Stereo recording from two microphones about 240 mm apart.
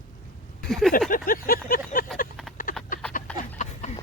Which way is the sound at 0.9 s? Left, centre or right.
Left.